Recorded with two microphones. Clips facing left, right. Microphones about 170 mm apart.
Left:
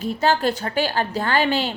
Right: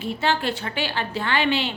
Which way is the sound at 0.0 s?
40° left (ahead or behind).